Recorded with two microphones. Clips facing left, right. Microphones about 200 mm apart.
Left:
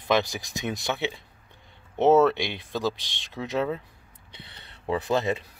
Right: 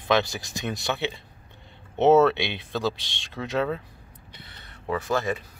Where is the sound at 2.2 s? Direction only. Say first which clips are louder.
Right 1 dB; 15° left (ahead or behind).